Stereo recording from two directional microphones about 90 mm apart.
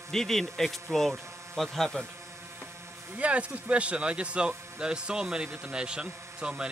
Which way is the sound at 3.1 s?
15° right (ahead or behind).